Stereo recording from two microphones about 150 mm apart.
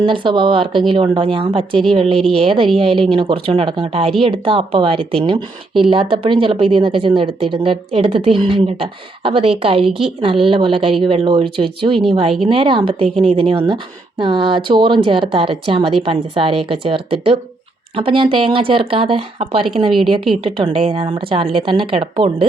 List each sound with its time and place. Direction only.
0.0 s a woman's voice: 35° right (ahead or behind)
13.1 s a woman's voice: 5° left (ahead or behind)
13.3 s a woman's voice: 35° right (ahead or behind)